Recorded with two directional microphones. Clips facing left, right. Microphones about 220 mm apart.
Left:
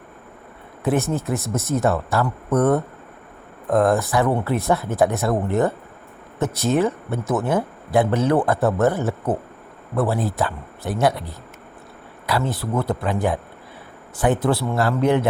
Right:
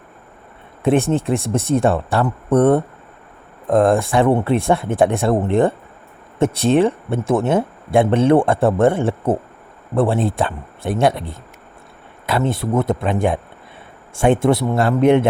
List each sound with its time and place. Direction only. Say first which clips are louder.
0.9 s speech: right 5 dB; 30° right (ahead or behind)